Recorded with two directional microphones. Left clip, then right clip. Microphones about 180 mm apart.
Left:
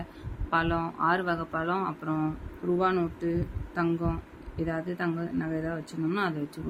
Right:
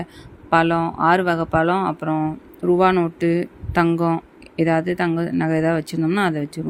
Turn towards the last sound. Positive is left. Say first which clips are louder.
# right 9 dB
turn(degrees=-40)  # may be behind; listen again after turning